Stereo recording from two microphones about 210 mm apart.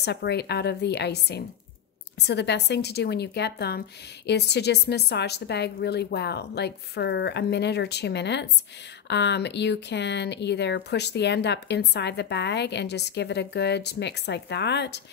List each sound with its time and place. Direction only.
0.0 s a woman's voice: 55° left (ahead or behind)